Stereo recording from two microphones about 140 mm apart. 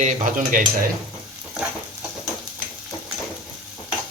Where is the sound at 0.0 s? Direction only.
70° right (ahead or behind).